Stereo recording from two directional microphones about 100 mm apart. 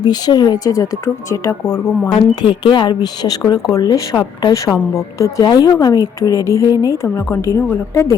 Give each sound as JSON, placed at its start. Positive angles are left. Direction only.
{"t": 0.0, "sound": "a woman's voice", "side_deg": 45}
{"t": 2.0, "sound": "a woman's voice", "side_deg": 50}